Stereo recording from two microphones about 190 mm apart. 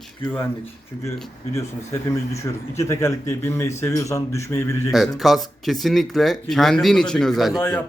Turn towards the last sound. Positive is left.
turn(degrees=0)  # may be behind; listen again after turning